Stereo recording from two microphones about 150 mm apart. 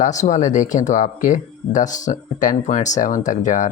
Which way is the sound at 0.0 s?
55° left (ahead or behind).